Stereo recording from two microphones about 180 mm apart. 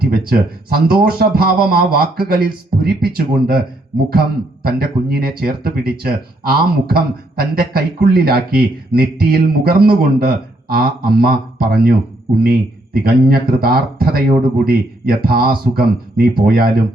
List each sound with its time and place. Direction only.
0.0 s speech: 55° right (ahead or behind)
4.6 s speech: 60° right (ahead or behind)